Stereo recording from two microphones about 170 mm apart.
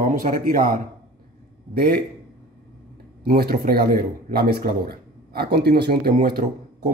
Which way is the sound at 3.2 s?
60° right (ahead or behind).